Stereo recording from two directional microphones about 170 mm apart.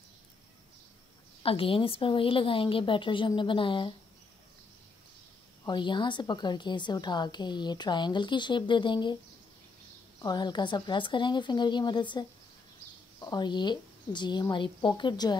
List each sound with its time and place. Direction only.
1.4 s a woman's voice: 30° left (ahead or behind)
5.7 s a woman's voice: 25° left (ahead or behind)
10.2 s a woman's voice: 25° left (ahead or behind)